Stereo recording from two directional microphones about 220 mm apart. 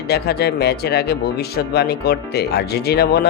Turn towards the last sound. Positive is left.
turn(degrees=45)  # may be behind; listen again after turning